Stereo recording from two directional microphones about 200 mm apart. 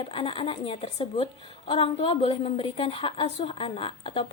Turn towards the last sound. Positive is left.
turn(degrees=25)  # may be behind; listen again after turning